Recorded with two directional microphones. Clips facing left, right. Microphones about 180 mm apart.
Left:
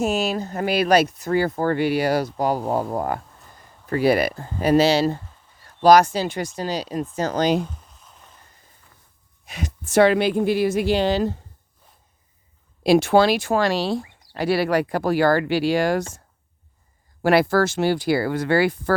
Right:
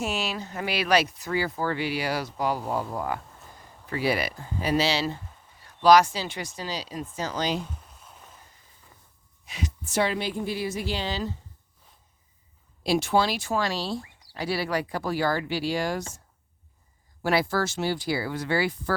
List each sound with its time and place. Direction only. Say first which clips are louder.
0.0 s speech: left 8 dB; 45° left (ahead or behind)
9.5 s speech: left 5 dB; 55° left (ahead or behind)
12.8 s speech: left 8 dB; 65° left (ahead or behind); by 16.2 s 80° left
17.2 s speech: left 7 dB; 65° left (ahead or behind)